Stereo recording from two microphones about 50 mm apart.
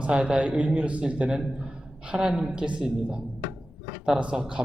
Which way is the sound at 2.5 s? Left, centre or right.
Right.